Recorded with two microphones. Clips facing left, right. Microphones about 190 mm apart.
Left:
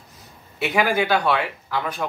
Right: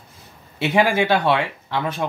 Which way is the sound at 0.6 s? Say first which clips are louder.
Right 3 dB; 25° right (ahead or behind).